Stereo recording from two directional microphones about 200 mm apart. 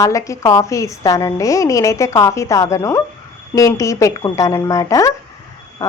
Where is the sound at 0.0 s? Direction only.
15° left (ahead or behind).